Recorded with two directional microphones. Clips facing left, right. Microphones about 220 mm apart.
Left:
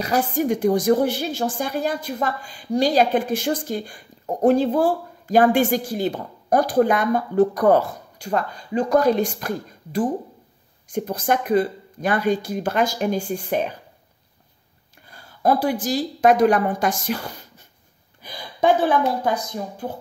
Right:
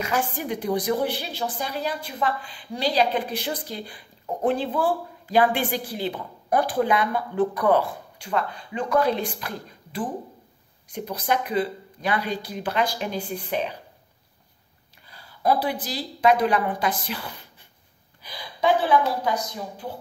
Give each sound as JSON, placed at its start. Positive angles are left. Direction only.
{"t": 0.0, "sound": "a woman's voice", "side_deg": 40}
{"t": 15.0, "sound": "a woman's voice", "side_deg": 50}